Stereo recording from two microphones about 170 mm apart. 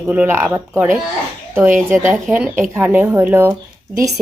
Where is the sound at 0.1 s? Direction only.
10° right (ahead or behind).